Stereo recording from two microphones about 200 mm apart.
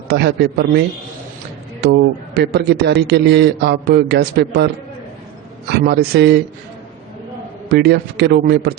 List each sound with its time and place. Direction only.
0.1 s a man's voice: 55° right (ahead or behind)
1.8 s a man's voice: 55° right (ahead or behind)
7.7 s a man's voice: 55° right (ahead or behind)